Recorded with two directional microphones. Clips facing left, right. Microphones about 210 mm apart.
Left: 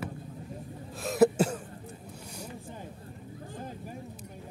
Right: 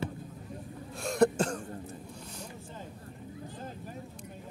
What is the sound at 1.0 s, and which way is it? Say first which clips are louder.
Cough: left 3 dB; 5° left (ahead or behind).